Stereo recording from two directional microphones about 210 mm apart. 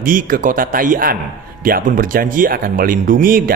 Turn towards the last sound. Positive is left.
turn(degrees=-40)  # may be behind; listen again after turning